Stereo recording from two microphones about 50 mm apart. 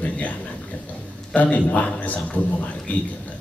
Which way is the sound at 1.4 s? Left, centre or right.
Left.